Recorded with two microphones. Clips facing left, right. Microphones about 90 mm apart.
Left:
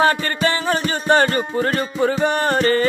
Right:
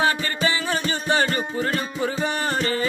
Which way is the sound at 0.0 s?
50° left (ahead or behind).